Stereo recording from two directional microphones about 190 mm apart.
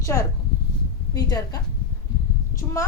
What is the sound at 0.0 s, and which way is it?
A woman's voice, 15° left (ahead or behind).